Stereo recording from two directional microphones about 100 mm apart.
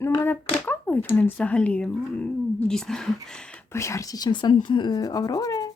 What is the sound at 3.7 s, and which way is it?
Speech, 30° left (ahead or behind).